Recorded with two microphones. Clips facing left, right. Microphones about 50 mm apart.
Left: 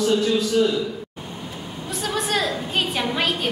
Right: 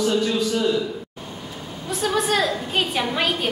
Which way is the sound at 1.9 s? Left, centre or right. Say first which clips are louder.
Right 3 dB; centre.